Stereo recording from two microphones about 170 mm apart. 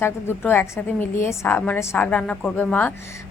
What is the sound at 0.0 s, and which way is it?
A woman's voice, 15° left (ahead or behind).